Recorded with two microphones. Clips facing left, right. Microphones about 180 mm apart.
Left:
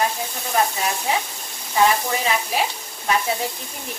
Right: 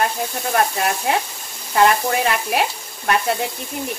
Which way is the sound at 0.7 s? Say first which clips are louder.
Right 3 dB; 60° right (ahead or behind).